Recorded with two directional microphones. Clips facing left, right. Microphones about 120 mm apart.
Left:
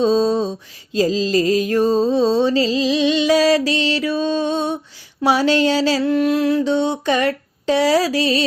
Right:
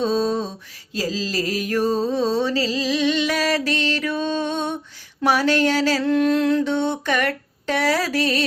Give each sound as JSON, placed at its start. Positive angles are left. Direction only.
{"t": 0.0, "sound": "mantra", "side_deg": 25}
{"t": 0.9, "sound": "music", "side_deg": 25}
{"t": 2.4, "sound": "mantra", "side_deg": 20}